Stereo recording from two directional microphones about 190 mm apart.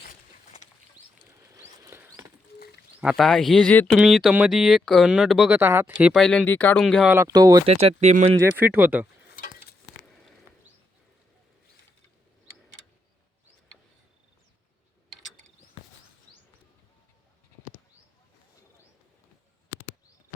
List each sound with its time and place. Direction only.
1.5 s patter: 15° right (ahead or behind)
3.0 s speech: centre (ahead or behind)
5.5 s speech: 10° right (ahead or behind)
7.1 s speech: 15° right (ahead or behind)
7.7 s speech: 30° right (ahead or behind)
8.4 s speech: 10° right (ahead or behind)